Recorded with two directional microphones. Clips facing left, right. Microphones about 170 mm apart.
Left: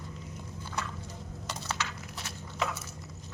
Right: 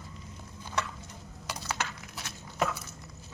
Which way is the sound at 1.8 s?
55° right (ahead or behind).